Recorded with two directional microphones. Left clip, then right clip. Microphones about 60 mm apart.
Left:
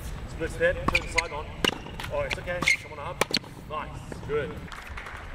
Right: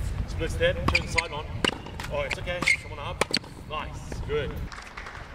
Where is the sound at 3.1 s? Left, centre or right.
Centre.